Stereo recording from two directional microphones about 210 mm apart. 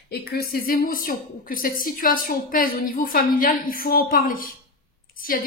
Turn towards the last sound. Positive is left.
turn(degrees=40)  # may be behind; listen again after turning